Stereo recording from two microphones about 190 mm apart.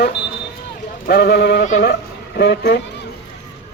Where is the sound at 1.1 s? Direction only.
55° left (ahead or behind).